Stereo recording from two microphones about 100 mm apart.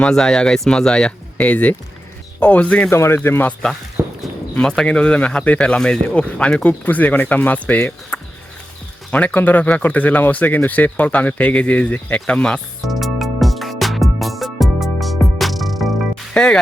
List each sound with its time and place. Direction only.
0.0 s speech: 5° left (ahead or behind)
2.9 s speech: 25° left (ahead or behind)
4.0 s clip-clop: 20° right (ahead or behind)
4.5 s speech: 5° left (ahead or behind)
12.2 s music: 5° left (ahead or behind)